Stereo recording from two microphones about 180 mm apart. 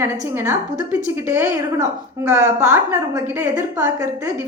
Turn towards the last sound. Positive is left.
turn(degrees=-15)  # may be behind; listen again after turning